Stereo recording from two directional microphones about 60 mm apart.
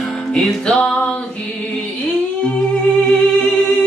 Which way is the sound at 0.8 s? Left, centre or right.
Left.